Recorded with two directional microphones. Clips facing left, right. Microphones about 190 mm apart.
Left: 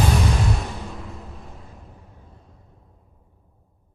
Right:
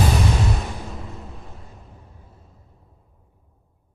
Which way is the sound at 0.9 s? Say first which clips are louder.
Right 1 dB; centre (ahead or behind).